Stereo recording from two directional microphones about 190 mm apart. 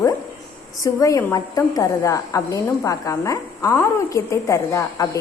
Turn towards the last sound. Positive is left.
turn(degrees=15)  # may be behind; listen again after turning